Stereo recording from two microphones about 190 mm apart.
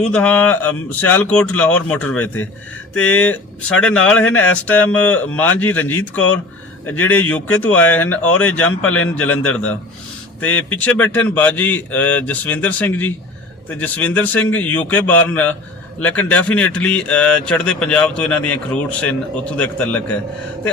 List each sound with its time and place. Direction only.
0.1 s speech: 5° left (ahead or behind)
8.9 s a man's voice: 90° left
9.1 s speech: 10° left (ahead or behind)
10.6 s speech: 10° left (ahead or behind)